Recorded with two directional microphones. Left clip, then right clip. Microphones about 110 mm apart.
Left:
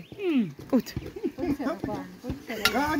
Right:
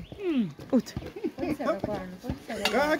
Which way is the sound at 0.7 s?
5° left (ahead or behind).